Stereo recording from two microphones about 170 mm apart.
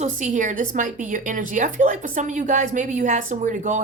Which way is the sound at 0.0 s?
45° right (ahead or behind).